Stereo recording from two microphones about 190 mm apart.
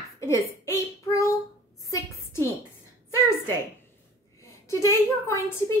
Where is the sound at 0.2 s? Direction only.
15° left (ahead or behind).